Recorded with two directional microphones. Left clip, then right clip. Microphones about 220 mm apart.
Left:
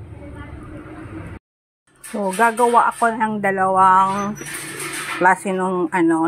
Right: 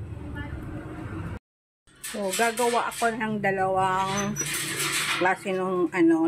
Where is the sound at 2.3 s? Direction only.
5° left (ahead or behind).